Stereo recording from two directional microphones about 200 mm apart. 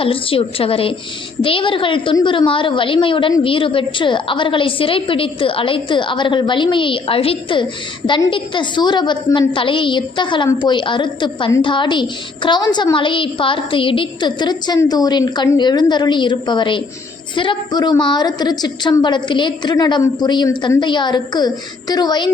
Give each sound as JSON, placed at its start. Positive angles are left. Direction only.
{"t": 0.0, "sound": "a woman's voice", "side_deg": 25}